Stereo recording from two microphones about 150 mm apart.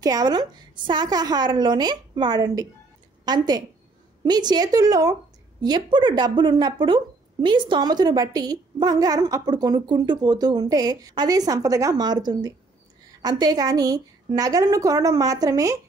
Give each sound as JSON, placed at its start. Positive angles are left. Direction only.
{"t": 0.0, "sound": "a woman's voice", "side_deg": -25}